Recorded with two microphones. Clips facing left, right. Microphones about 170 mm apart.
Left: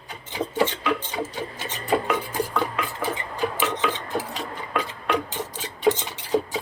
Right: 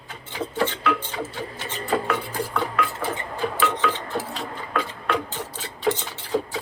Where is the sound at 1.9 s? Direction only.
20° left (ahead or behind).